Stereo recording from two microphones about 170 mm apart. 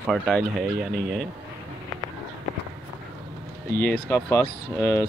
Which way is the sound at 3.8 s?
15° left (ahead or behind).